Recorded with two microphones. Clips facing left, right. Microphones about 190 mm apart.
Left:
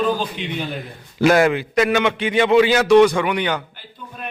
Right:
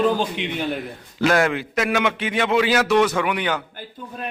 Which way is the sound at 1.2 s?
10° left (ahead or behind).